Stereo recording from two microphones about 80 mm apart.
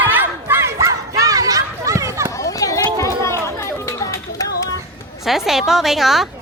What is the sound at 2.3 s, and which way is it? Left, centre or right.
Children playing, left.